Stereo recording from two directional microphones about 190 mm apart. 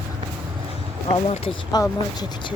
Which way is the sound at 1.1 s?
30° left (ahead or behind).